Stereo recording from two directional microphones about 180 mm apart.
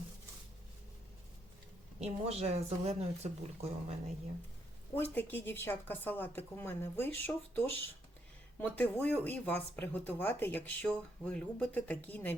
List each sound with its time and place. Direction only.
2.0 s speech: 35° right (ahead or behind)
4.9 s speech: 10° left (ahead or behind)
8.7 s speech: 10° left (ahead or behind)